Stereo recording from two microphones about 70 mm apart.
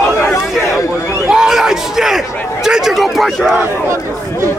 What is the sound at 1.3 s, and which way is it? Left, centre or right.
A man's voice, centre.